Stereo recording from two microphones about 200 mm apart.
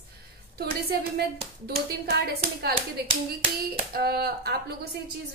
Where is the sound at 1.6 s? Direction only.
55° right (ahead or behind).